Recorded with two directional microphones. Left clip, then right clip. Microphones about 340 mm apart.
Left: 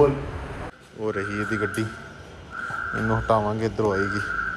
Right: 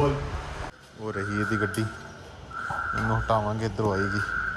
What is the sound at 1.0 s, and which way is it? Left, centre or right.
Speech, centre.